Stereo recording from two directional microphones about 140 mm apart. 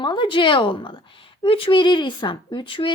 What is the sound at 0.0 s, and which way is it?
Speech, 35° left (ahead or behind).